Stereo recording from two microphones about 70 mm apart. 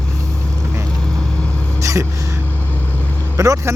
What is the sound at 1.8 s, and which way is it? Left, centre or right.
Speech, right.